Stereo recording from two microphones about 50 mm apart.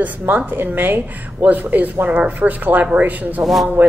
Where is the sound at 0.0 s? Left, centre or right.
Right.